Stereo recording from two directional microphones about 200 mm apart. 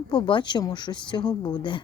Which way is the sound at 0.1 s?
20° left (ahead or behind).